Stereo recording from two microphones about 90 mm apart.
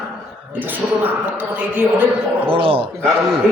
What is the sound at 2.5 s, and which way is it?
Speech, 90° right.